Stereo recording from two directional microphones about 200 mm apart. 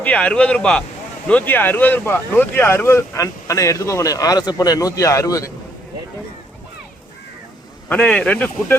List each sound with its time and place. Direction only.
0.0 s speech: 5° left (ahead or behind)
7.9 s speech: 5° left (ahead or behind)